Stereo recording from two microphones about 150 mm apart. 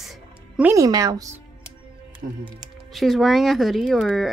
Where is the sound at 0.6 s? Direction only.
20° right (ahead or behind).